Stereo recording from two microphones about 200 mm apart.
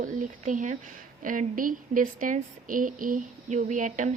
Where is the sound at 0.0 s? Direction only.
40° right (ahead or behind).